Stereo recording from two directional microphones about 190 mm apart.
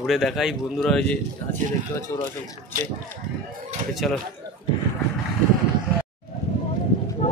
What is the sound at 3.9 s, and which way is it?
Speech, centre (ahead or behind).